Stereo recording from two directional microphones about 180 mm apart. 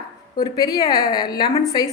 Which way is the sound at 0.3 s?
20° left (ahead or behind).